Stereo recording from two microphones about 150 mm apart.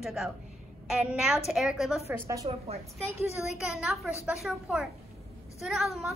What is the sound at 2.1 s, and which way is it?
Speech, 20° right (ahead or behind).